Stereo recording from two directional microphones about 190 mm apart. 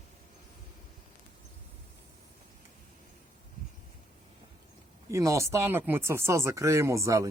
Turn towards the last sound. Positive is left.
turn(degrees=-15)  # may be behind; listen again after turning